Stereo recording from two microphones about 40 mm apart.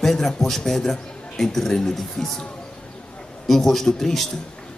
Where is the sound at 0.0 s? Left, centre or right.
Centre.